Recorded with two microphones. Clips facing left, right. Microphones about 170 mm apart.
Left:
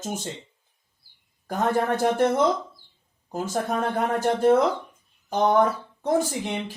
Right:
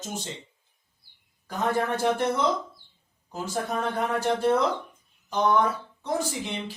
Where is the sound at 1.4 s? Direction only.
50° left (ahead or behind).